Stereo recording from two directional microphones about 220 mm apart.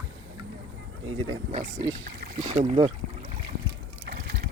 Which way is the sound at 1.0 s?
65° right (ahead or behind).